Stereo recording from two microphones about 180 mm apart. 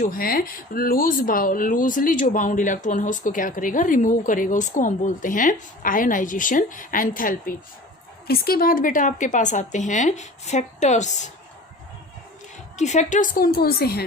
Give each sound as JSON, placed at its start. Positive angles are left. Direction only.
{"t": 0.0, "sound": "speech", "side_deg": 55}
{"t": 12.7, "sound": "speech", "side_deg": 40}